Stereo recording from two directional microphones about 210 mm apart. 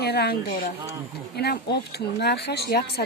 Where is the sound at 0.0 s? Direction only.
50° left (ahead or behind).